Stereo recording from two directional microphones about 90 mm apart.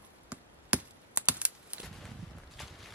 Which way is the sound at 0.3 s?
15° right (ahead or behind).